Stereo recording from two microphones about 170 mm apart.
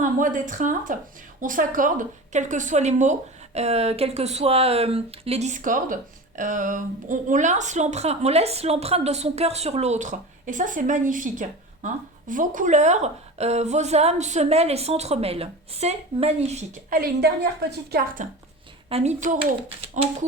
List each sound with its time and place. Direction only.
0.0 s a woman's voice: 50° right (ahead or behind)
16.9 s a woman's voice: 65° right (ahead or behind)
18.2 s a woman's voice: 45° right (ahead or behind)
18.9 s speech: 35° right (ahead or behind)